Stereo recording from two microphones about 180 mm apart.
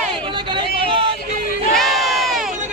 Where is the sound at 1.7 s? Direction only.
Centre (ahead or behind).